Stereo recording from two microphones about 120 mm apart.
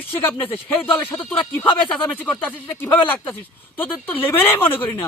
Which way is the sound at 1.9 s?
10° left (ahead or behind).